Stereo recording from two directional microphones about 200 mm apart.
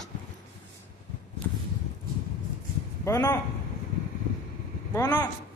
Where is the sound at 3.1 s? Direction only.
20° left (ahead or behind).